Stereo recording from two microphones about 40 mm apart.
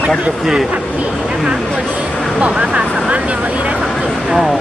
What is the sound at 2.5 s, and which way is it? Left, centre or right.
Speech, right.